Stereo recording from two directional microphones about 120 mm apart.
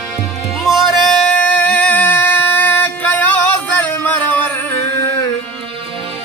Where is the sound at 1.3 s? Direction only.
10° left (ahead or behind).